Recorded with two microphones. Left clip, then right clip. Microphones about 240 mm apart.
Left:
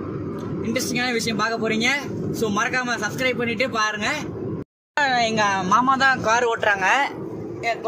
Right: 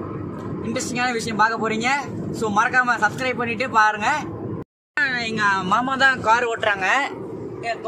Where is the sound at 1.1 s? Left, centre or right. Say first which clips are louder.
Right 3 dB; centre.